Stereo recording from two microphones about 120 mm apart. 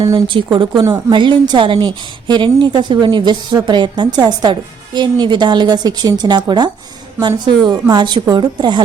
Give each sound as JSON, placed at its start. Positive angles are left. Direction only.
{"t": 0.0, "sound": "a woman's voice", "side_deg": -40}